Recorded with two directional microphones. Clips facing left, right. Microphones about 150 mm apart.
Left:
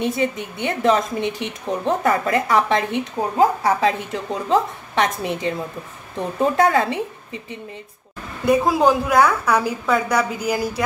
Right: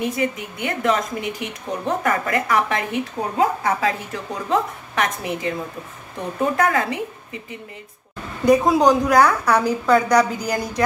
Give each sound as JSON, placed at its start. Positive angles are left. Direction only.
{"t": 0.0, "sound": "a woman's voice", "side_deg": 25}
{"t": 6.5, "sound": "a woman's voice", "side_deg": 30}
{"t": 8.5, "sound": "a woman's voice", "side_deg": 5}